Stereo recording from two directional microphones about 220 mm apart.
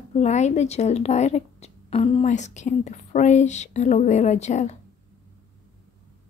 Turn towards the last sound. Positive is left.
turn(degrees=30)  # may be behind; listen again after turning